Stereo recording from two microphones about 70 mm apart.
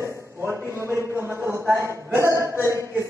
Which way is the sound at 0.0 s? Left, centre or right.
Right.